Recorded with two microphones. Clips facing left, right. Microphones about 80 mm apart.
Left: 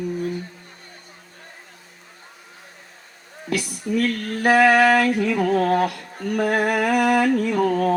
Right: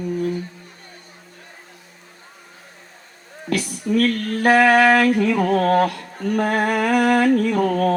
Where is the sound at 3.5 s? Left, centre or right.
Right.